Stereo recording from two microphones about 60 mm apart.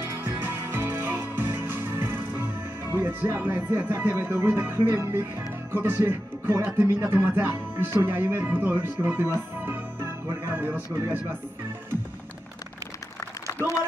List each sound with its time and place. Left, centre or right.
0.1 s music: right
2.9 s speech: right
7.2 s music: right
8.5 s speech: right
9.0 s music: right
13.5 s a sound: left